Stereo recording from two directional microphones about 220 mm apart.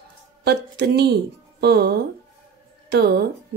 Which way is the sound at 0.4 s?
50° right (ahead or behind).